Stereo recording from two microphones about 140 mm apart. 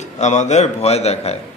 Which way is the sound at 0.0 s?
55° left (ahead or behind).